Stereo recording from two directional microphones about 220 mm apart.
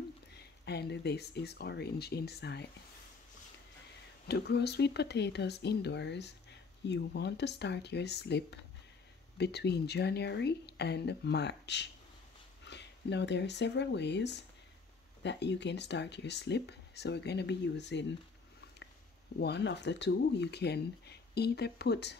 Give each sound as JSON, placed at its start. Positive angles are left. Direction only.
{"t": 0.3, "sound": "speech", "side_deg": 50}
{"t": 4.3, "sound": "speech", "side_deg": 50}
{"t": 19.4, "sound": "speech", "side_deg": 50}